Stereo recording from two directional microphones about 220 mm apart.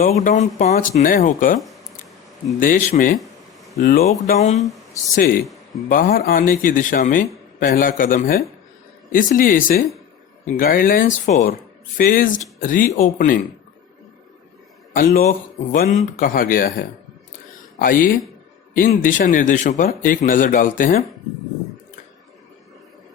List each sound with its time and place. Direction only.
0.2 s a man's voice: 35° left (ahead or behind)
2.6 s a man's voice: 40° left (ahead or behind)
4.6 s speech: centre (ahead or behind)
5.1 s a man's voice: 40° left (ahead or behind)
14.9 s a man's voice: 40° left (ahead or behind)
17.7 s a man's voice: 40° left (ahead or behind)